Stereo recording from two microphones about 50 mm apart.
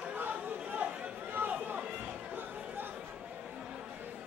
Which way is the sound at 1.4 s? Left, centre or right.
Right.